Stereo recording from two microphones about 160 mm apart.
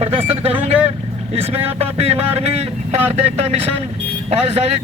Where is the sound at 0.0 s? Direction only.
40° right (ahead or behind).